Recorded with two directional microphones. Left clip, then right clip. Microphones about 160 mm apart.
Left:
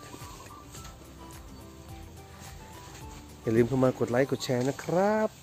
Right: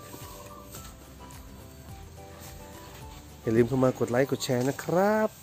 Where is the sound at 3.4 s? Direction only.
5° right (ahead or behind).